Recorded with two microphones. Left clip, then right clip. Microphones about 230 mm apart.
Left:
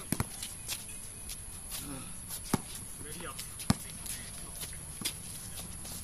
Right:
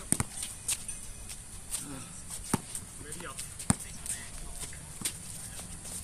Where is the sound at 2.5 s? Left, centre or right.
Centre.